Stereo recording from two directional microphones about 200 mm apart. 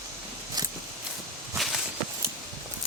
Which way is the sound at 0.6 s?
20° right (ahead or behind).